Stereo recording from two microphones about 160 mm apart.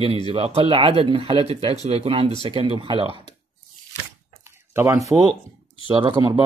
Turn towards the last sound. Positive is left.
turn(degrees=-30)  # may be behind; listen again after turning